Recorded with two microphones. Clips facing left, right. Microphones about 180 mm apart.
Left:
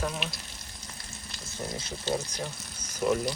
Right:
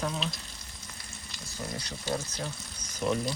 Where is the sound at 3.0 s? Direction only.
Centre (ahead or behind).